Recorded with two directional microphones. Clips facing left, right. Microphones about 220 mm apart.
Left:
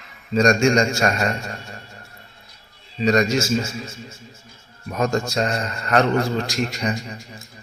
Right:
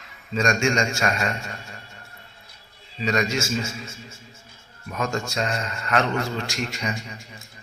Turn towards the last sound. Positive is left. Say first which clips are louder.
# left 4 dB
turn(degrees=35)  # may be behind; listen again after turning